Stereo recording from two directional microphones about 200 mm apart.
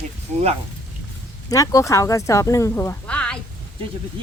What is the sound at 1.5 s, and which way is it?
Speech, 15° left (ahead or behind).